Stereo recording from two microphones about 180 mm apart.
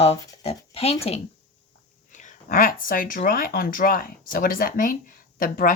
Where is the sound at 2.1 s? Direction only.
45° left (ahead or behind).